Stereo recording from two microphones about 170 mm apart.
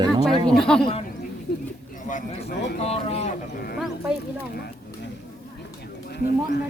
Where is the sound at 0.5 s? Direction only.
5° left (ahead or behind).